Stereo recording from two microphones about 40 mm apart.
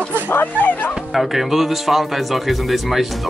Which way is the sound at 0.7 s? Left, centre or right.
Left.